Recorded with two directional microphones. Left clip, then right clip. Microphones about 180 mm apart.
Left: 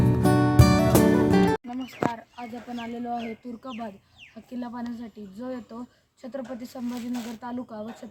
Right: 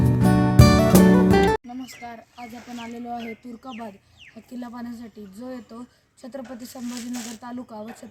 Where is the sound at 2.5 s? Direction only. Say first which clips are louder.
Left 3 dB; 25° left (ahead or behind).